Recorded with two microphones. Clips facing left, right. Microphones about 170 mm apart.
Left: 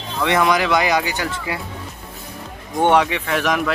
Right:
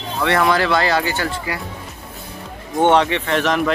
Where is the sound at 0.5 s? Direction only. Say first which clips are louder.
Even; 15° left (ahead or behind).